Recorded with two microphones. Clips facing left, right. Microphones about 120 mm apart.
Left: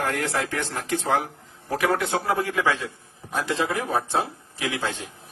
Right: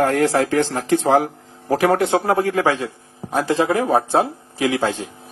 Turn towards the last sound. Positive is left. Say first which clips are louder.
# right 9 dB
turn(degrees=-35)  # may be behind; listen again after turning